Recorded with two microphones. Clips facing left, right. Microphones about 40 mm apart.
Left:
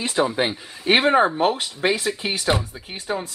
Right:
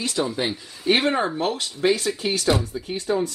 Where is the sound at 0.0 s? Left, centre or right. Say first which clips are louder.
Left 3 dB; left.